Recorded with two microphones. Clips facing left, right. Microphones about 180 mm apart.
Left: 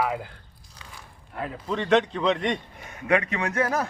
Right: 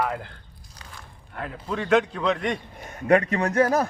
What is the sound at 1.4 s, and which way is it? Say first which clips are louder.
A man's voice: left 1 dB; centre (ahead or behind).